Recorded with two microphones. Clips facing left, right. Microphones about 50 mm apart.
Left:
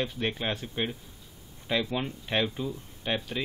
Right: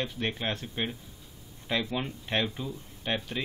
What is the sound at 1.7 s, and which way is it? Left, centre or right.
Speech, centre.